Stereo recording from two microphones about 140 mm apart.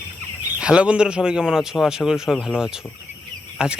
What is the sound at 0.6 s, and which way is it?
A man's voice, 10° right (ahead or behind).